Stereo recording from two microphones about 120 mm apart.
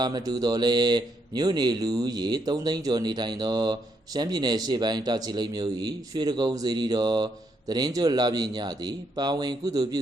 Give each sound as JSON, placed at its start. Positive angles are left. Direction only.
{"t": 0.0, "sound": "speech", "side_deg": -35}